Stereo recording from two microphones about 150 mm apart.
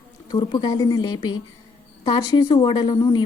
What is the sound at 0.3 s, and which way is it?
A woman's voice, 30° left (ahead or behind).